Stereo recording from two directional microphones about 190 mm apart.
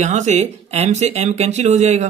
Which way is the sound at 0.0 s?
40° right (ahead or behind).